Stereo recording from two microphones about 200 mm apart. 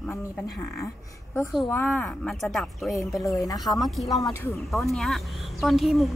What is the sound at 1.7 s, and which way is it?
Speech, 10° left (ahead or behind).